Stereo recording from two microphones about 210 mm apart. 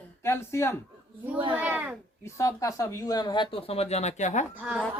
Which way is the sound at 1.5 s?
10° right (ahead or behind).